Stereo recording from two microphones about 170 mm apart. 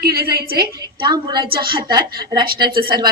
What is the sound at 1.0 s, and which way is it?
A woman's voice, 25° right (ahead or behind).